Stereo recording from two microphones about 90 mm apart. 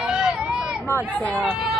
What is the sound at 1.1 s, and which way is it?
Speech, 15° left (ahead or behind).